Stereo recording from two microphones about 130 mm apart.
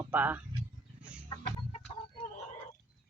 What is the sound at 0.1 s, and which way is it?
Speech, 15° right (ahead or behind).